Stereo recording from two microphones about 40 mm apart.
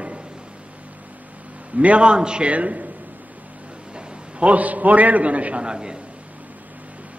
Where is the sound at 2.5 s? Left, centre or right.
Right.